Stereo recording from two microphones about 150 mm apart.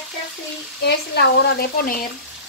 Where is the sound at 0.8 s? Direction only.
90° left.